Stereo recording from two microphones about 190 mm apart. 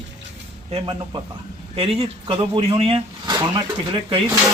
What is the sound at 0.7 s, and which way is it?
Speech, 25° right (ahead or behind).